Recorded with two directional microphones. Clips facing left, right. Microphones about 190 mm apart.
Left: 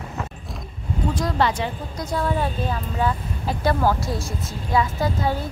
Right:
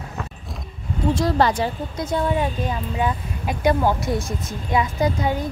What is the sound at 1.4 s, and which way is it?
Speech, 40° right (ahead or behind).